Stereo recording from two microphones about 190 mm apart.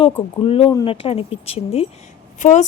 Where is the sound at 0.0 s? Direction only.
30° left (ahead or behind).